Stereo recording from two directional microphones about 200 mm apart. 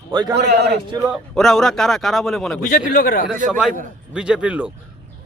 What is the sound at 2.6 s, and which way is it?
Speech, 40° left (ahead or behind).